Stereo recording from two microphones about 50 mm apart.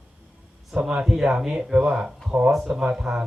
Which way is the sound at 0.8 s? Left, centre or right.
Centre.